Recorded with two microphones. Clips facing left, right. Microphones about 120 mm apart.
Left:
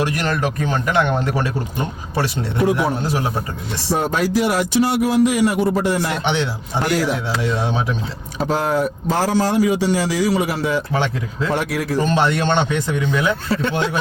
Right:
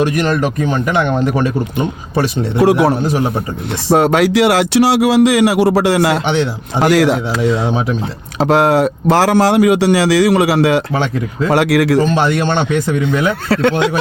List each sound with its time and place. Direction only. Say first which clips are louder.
1.2 s speech: right 6 dB; 15° right (ahead or behind)
2.6 s a man's voice: right 7 dB; 80° right